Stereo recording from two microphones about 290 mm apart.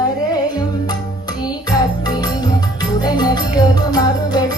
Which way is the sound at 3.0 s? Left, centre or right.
Centre.